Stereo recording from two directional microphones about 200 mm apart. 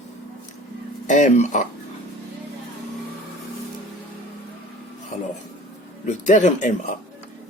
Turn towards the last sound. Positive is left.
turn(degrees=35)  # may be behind; listen again after turning